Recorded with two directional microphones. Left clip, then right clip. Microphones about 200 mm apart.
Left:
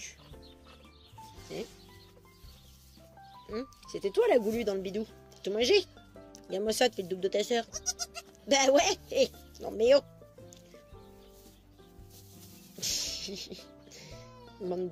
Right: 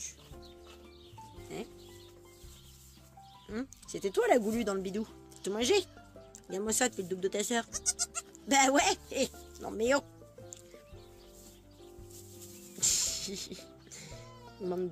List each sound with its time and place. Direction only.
3.4 s speech: 40° right (ahead or behind)
12.8 s music: 35° right (ahead or behind)